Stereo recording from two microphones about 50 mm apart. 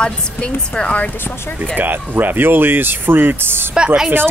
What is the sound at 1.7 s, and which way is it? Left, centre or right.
Speech, right.